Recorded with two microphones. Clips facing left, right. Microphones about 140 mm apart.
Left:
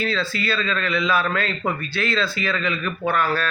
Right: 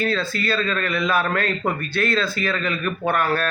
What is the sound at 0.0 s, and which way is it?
A man's voice, 45° right (ahead or behind).